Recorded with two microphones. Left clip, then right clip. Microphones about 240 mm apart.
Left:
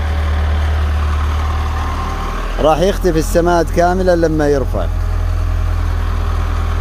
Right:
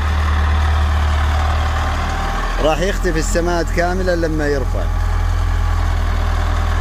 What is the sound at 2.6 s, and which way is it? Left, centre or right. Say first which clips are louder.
Speech: left 6 dB; centre.